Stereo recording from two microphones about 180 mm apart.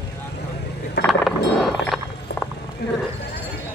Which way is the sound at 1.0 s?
Centre (ahead or behind).